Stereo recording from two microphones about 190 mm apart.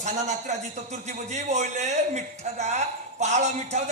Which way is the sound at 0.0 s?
40° right (ahead or behind).